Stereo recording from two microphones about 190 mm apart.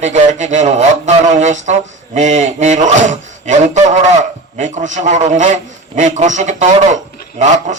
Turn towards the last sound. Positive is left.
turn(degrees=-40)  # may be behind; listen again after turning